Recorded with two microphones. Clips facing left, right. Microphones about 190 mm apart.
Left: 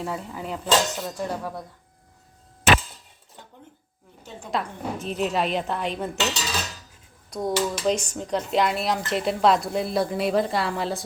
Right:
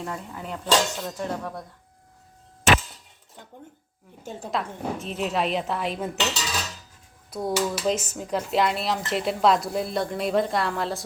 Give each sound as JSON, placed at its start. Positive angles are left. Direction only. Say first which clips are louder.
{"t": 0.0, "sound": "speech", "louder": "left 3 dB", "side_deg": 5}
{"t": 4.2, "sound": "speech", "louder": "right 5 dB", "side_deg": -45}
{"t": 4.5, "sound": "speech", "louder": "left 1 dB", "side_deg": 0}
{"t": 7.3, "sound": "speech", "louder": "left 1 dB", "side_deg": -5}